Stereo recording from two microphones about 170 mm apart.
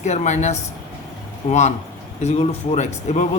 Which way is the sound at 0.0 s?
45° left (ahead or behind).